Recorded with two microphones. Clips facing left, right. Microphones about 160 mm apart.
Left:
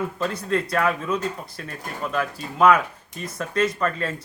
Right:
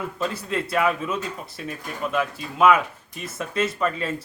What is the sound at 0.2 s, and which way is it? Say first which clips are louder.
A man's voice: left 1 dB; 5° right (ahead or behind).